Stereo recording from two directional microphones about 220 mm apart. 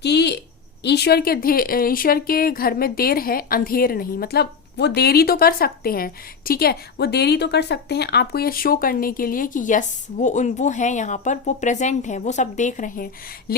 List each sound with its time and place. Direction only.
0.0 s a woman's voice: 50° left (ahead or behind)